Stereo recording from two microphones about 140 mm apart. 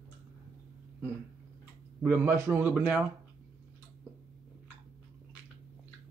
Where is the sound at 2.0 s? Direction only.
15° right (ahead or behind).